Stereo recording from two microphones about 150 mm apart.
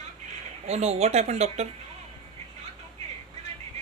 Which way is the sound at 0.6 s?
45° right (ahead or behind).